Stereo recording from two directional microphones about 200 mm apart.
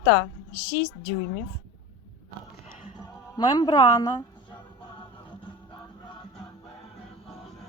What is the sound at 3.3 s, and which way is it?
Speech, 20° left (ahead or behind).